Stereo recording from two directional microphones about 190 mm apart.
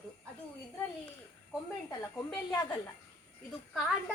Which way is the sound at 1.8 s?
15° left (ahead or behind).